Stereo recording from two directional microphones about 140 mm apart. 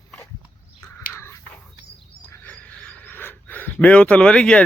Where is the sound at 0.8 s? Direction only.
15° left (ahead or behind).